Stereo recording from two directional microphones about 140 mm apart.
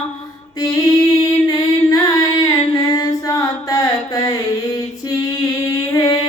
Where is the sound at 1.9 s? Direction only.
25° left (ahead or behind).